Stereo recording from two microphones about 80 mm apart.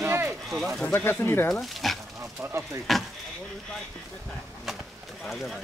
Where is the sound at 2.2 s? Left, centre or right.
Right.